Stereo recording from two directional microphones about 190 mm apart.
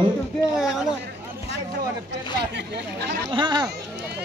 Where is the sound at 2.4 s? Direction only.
65° right (ahead or behind).